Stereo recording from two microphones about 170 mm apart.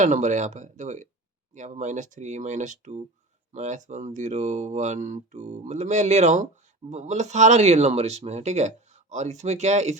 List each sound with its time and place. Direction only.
0.0 s speech: 45° right (ahead or behind)